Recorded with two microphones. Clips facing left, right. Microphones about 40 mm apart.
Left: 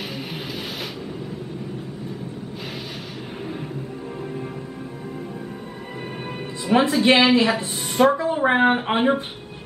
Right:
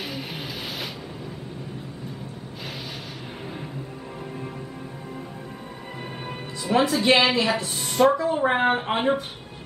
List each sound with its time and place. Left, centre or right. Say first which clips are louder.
6.6 s speech: left 2 dB; left
7.0 s a woman's voice: left 4 dB; centre